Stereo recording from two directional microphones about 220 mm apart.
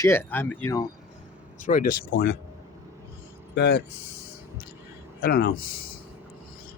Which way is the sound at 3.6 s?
55° left (ahead or behind).